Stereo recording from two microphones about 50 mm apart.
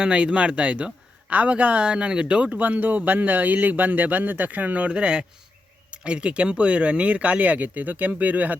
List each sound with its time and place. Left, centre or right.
0.0 s speech: right